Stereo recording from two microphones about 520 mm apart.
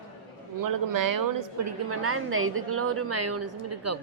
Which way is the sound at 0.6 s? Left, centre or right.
Right.